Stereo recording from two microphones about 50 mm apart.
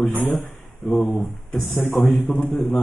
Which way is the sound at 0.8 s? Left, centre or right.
Centre.